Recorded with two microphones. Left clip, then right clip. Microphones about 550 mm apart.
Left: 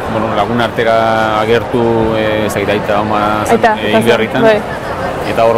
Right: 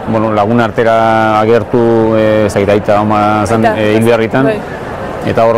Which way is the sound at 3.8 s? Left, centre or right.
Right.